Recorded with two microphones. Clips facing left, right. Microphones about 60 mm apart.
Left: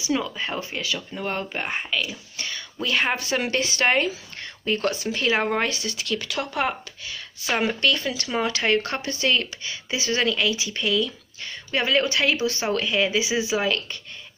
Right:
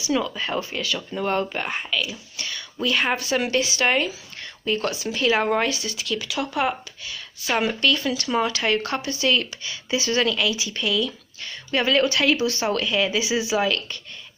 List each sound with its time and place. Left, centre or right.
0.0 s speech: left
0.9 s speech: centre
1.5 s speech: left
2.0 s speech: left
3.4 s speech: left
5.3 s speech: centre
5.9 s speech: left